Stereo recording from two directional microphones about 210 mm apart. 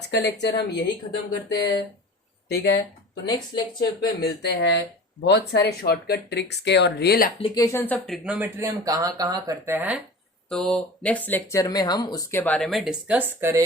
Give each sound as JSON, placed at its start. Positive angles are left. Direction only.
{"t": 0.1, "sound": "speech", "side_deg": 55}
{"t": 3.2, "sound": "speech", "side_deg": 20}
{"t": 4.2, "sound": "speech", "side_deg": 55}
{"t": 7.3, "sound": "speech", "side_deg": 20}
{"t": 10.5, "sound": "speech", "side_deg": 5}